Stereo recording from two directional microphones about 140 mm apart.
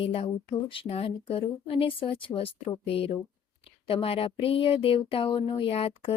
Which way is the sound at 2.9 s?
45° left (ahead or behind).